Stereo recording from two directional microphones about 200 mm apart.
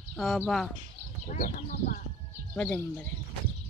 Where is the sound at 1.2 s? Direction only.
45° left (ahead or behind).